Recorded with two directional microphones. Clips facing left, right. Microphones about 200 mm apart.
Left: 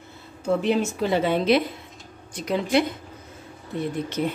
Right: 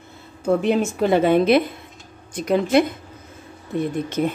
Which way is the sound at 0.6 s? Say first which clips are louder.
Right 2 dB; 55° right (ahead or behind).